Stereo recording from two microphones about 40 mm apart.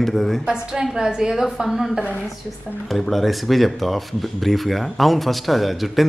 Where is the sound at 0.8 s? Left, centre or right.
Centre.